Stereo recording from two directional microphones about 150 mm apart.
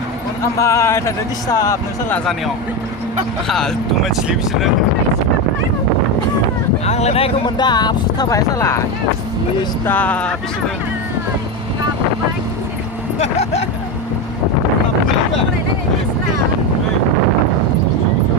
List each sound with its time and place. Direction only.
0.6 s speech: 20° left (ahead or behind)
3.5 s speech: centre (ahead or behind)
6.8 s speech: 45° left (ahead or behind); by 8.8 s 20° left (ahead or behind)
9.8 s speech: 10° left (ahead or behind)
13.1 s vehicle: 45° left (ahead or behind)